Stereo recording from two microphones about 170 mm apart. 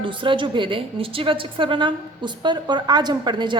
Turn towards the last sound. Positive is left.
turn(degrees=-25)  # may be behind; listen again after turning